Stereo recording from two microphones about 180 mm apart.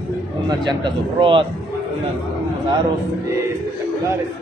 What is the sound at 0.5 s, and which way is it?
Speech, 25° right (ahead or behind).